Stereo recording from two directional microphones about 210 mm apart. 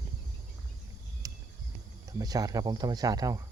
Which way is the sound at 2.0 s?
15° right (ahead or behind).